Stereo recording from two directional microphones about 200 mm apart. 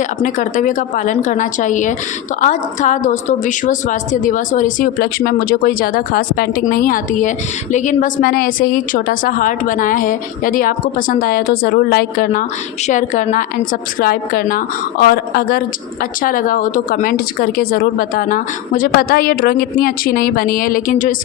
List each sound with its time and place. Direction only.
0.2 s a woman's voice: 40° left (ahead or behind)